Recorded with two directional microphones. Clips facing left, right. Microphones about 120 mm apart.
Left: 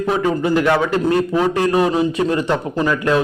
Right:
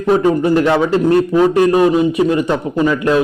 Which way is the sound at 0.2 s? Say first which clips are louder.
Right 4 dB; 25° right (ahead or behind).